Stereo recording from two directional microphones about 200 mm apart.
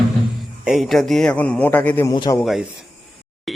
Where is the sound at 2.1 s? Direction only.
20° left (ahead or behind).